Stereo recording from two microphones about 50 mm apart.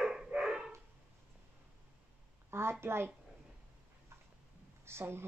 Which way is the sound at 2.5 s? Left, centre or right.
Right.